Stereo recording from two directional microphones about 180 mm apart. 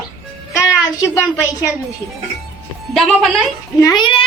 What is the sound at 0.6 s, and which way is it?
Speech, 15° left (ahead or behind).